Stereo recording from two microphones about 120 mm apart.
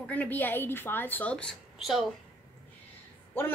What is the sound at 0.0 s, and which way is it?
A woman's voice, 15° left (ahead or behind).